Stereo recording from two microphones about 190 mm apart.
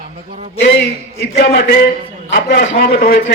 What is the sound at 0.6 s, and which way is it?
Speech, 70° left (ahead or behind).